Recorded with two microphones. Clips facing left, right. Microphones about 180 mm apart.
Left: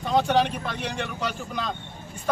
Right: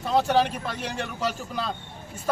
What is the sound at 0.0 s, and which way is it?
A man's voice, 5° right (ahead or behind).